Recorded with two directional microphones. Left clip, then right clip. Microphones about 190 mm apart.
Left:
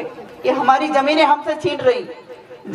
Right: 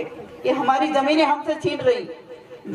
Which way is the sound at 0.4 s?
25° left (ahead or behind).